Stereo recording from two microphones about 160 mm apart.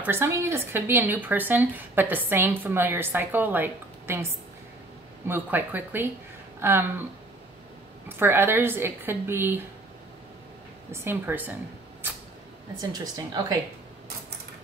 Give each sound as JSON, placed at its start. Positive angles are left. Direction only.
{"t": 0.0, "sound": "speech", "side_deg": -15}
{"t": 5.3, "sound": "speech", "side_deg": -10}
{"t": 8.2, "sound": "speech", "side_deg": -15}
{"t": 10.9, "sound": "speech", "side_deg": -15}
{"t": 12.9, "sound": "speech", "side_deg": -25}